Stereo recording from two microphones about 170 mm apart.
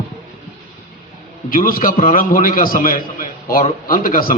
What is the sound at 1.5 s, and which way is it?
A man's voice, 55° left (ahead or behind).